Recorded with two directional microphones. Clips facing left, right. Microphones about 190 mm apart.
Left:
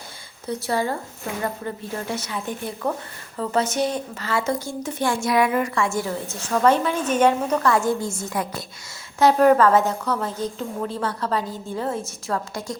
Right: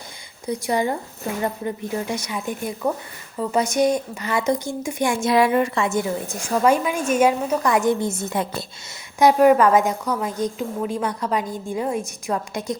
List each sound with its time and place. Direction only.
0.4 s a woman's voice: 15° right (ahead or behind)
5.3 s a woman's voice: 25° right (ahead or behind)
9.1 s a woman's voice: 10° right (ahead or behind)